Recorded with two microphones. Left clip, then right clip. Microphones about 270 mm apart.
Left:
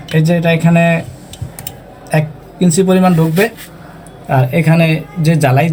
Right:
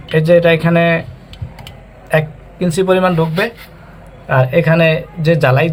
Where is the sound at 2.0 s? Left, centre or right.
Right.